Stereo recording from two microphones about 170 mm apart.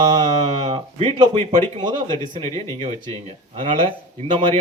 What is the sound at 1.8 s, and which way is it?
Speech, 25° right (ahead or behind).